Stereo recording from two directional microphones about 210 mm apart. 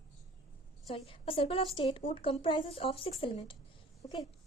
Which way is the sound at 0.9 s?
25° left (ahead or behind).